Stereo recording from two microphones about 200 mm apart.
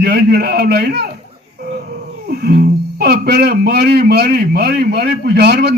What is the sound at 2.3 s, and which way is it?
Speech, 50° right (ahead or behind).